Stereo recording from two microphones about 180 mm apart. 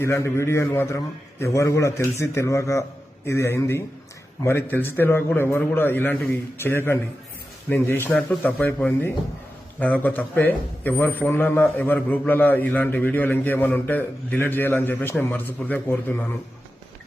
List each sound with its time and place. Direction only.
0.0 s a man's voice: 15° left (ahead or behind)